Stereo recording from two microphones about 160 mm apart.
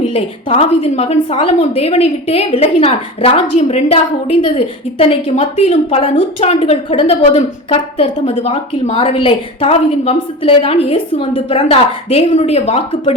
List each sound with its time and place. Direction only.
0.0 s a woman's voice: 40° left (ahead or behind)